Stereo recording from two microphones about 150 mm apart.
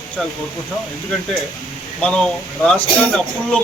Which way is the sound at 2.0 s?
5° left (ahead or behind).